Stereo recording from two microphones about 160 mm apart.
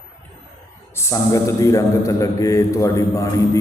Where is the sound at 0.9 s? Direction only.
20° left (ahead or behind).